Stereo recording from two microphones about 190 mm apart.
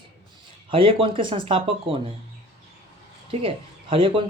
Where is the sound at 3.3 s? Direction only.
30° right (ahead or behind).